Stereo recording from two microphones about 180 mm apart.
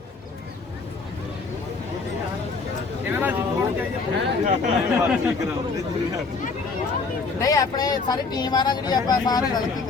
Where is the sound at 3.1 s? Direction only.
10° right (ahead or behind).